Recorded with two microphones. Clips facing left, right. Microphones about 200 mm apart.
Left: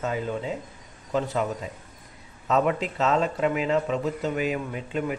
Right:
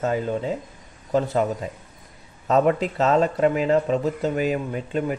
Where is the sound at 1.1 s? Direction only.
40° right (ahead or behind).